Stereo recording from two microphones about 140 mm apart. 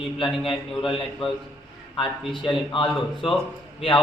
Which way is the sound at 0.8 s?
Centre (ahead or behind).